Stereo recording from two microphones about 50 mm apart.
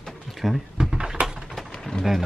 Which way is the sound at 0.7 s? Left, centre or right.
Centre.